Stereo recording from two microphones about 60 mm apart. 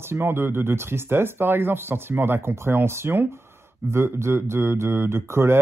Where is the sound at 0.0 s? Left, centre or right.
Right.